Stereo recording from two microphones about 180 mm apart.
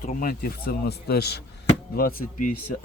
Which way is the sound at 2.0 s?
50° left (ahead or behind).